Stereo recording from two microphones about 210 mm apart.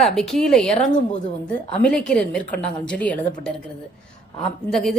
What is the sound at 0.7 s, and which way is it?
Speech, 35° left (ahead or behind).